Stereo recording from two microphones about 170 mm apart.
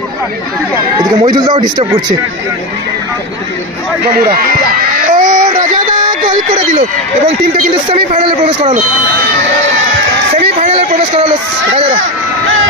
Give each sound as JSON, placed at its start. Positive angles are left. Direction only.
{"t": 0.9, "sound": "a man's voice", "side_deg": -25}
{"t": 4.0, "sound": "a sound", "side_deg": -60}
{"t": 6.0, "sound": "speech", "side_deg": -30}
{"t": 8.3, "sound": "speech", "side_deg": -30}
{"t": 10.3, "sound": "a sound", "side_deg": -40}
{"t": 11.7, "sound": "speech", "side_deg": -35}